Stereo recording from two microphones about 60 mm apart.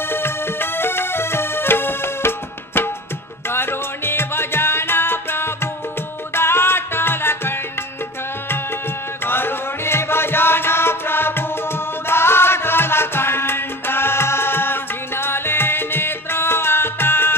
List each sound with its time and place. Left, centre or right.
0.1 s music: left
9.2 s music: left